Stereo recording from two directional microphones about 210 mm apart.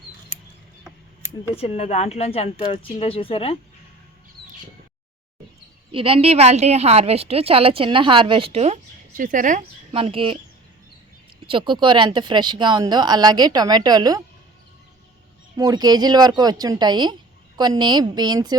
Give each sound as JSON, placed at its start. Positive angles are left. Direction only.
{"t": 1.6, "sound": "speech", "side_deg": 30}
{"t": 5.9, "sound": "a woman's voice", "side_deg": -25}
{"t": 11.4, "sound": "a woman's voice", "side_deg": -25}
{"t": 15.5, "sound": "a woman's voice", "side_deg": -20}